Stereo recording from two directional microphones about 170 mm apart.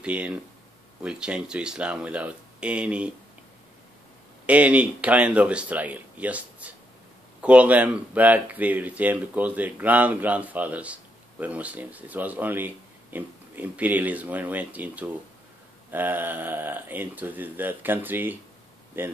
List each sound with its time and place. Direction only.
0.0 s speech: 5° right (ahead or behind)
4.5 s speech: 10° right (ahead or behind)